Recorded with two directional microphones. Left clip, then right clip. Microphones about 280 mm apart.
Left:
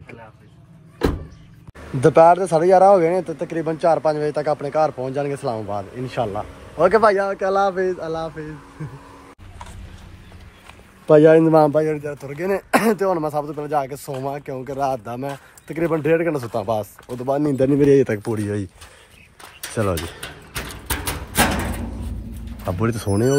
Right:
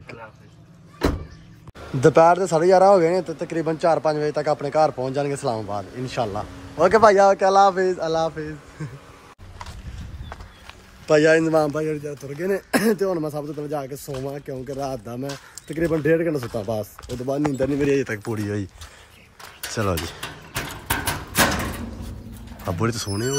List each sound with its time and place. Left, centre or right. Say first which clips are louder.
2.0 s speech: left 2 dB; centre
11.1 s a man's voice: left 5 dB; centre
12.3 s speech: left 4 dB; centre
13.9 s speech: left 2 dB; centre
14.2 s speech: left 4 dB; centre
17.6 s a man's voice: left 9 dB; left
18.2 s speech: left 3 dB; centre
19.7 s speech: left 2 dB; centre
22.7 s speech: left 3 dB; centre